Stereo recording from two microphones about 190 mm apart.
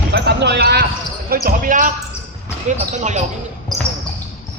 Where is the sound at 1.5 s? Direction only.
45° right (ahead or behind).